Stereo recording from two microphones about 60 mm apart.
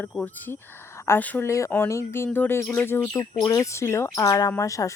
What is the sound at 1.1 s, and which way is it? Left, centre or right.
Speech, left.